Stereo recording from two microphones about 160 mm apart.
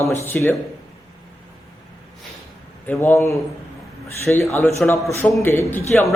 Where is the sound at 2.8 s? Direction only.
10° left (ahead or behind).